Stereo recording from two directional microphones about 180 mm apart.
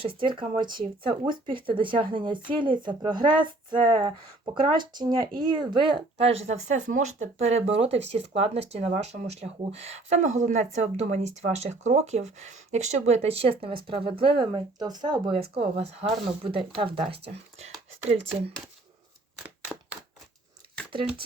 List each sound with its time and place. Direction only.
0.0 s speech: 30° right (ahead or behind)
17.1 s speech: 65° right (ahead or behind)
19.4 s a sound: 10° right (ahead or behind)